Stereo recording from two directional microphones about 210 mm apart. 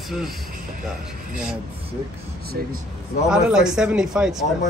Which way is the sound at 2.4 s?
45° right (ahead or behind).